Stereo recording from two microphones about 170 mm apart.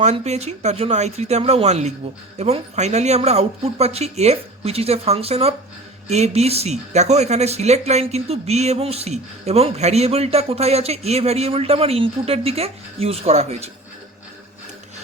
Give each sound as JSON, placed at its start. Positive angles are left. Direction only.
{"t": 0.0, "sound": "speech", "side_deg": -40}